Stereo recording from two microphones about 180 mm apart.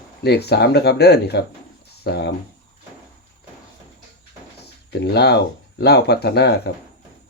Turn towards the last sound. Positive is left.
turn(degrees=65)  # may be behind; listen again after turning